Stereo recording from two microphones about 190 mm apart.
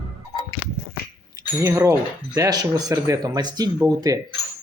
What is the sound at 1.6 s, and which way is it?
Speech, 15° right (ahead or behind).